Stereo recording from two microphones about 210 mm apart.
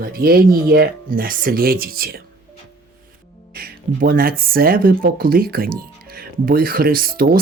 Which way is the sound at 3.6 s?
45° right (ahead or behind).